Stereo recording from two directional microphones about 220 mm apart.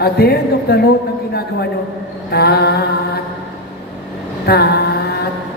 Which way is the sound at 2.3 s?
45° left (ahead or behind).